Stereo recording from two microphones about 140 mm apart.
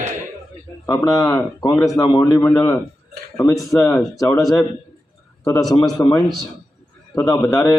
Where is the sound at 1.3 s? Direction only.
30° left (ahead or behind); by 3.9 s 10° left (ahead or behind).